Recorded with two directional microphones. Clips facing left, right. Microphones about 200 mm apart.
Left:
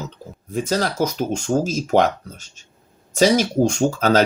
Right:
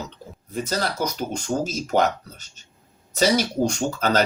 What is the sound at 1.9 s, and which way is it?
Speech, 45° left (ahead or behind).